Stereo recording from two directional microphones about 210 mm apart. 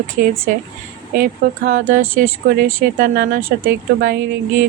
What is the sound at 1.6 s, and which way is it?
Speech, 60° right (ahead or behind).